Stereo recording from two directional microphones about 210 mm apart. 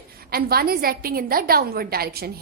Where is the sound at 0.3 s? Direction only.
45° right (ahead or behind).